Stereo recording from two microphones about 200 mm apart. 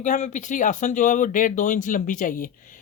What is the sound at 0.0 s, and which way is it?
Speech, 40° left (ahead or behind).